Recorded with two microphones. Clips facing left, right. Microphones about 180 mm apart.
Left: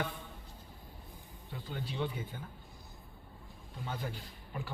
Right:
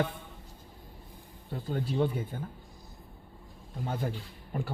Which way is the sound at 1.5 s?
50° right (ahead or behind).